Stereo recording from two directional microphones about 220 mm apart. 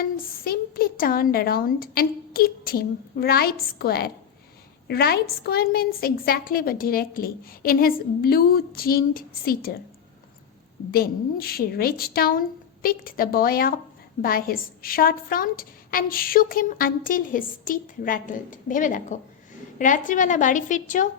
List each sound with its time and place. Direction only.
0.0 s a woman's voice: 45° left (ahead or behind)
10.9 s a woman's voice: 45° left (ahead or behind)